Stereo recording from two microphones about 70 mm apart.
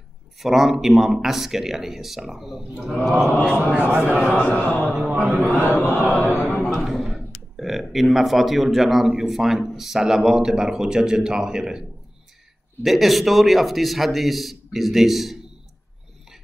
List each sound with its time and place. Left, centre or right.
0.4 s speech: centre
3.4 s speech: centre
4.5 s a sound: left
4.9 s speech: centre
5.2 s a man's voice: right
5.7 s a sound: left
6.2 s speech: left
6.7 s a sound: centre
7.5 s speech: centre
12.8 s speech: centre